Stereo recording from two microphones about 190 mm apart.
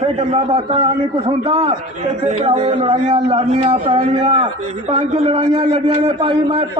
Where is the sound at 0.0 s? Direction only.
35° right (ahead or behind).